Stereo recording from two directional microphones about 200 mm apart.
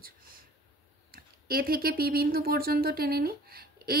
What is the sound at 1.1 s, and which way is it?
Speech, 50° right (ahead or behind).